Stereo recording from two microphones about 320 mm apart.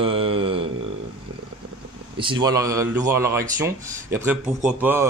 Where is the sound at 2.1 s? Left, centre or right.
Centre.